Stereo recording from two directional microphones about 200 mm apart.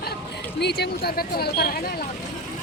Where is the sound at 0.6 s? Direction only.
55° left (ahead or behind).